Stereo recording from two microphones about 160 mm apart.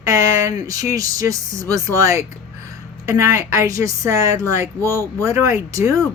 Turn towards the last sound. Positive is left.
turn(degrees=-20)  # may be behind; listen again after turning